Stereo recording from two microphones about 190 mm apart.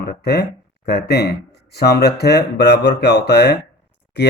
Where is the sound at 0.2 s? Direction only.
60° left (ahead or behind).